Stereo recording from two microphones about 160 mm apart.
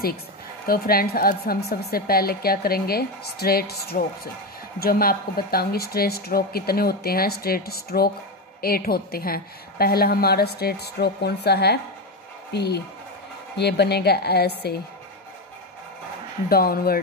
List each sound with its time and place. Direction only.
0.7 s a woman's voice: 70° left (ahead or behind); by 14.8 s 90° left
16.4 s a woman's voice: 70° left (ahead or behind)